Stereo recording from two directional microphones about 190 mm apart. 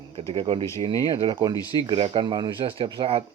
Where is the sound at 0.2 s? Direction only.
25° right (ahead or behind).